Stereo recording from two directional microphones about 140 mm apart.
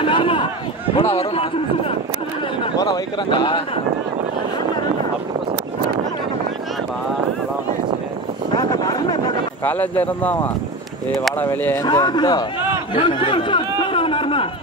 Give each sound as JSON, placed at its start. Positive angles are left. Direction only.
{"t": 0.0, "sound": "a sound", "side_deg": 40}
{"t": 0.9, "sound": "speech", "side_deg": 45}
{"t": 2.6, "sound": "speech", "side_deg": 30}
{"t": 8.5, "sound": "a sound", "side_deg": 30}
{"t": 9.7, "sound": "speech", "side_deg": 10}
{"t": 11.8, "sound": "speech", "side_deg": 30}
{"t": 12.9, "sound": "chatter", "side_deg": 35}